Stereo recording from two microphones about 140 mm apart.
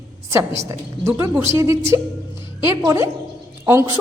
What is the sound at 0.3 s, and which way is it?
A woman's voice, 20° right (ahead or behind).